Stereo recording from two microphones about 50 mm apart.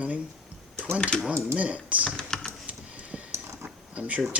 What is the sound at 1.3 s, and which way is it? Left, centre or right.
Speech, right.